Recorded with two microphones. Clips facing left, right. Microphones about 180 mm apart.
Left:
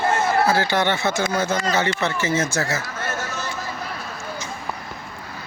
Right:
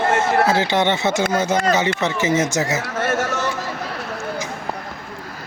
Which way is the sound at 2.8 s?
85° right.